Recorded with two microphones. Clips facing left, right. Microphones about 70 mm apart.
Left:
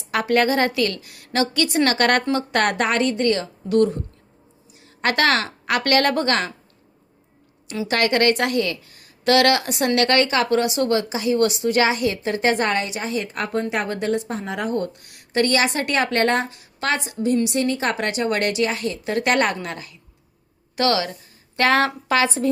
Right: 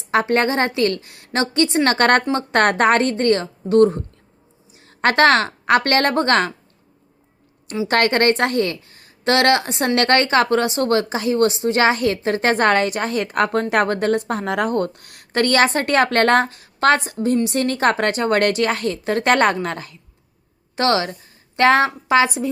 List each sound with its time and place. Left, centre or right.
0.1 s a woman's voice: right
7.9 s a woman's voice: right